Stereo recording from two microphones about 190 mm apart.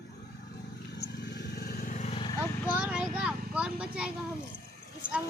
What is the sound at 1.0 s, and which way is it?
Vehicle, 60° left (ahead or behind).